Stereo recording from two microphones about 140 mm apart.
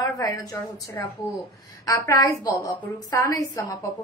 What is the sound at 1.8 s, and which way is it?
A woman's voice, 25° left (ahead or behind).